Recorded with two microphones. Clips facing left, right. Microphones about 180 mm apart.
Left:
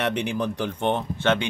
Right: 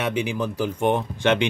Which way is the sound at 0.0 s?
5° right (ahead or behind).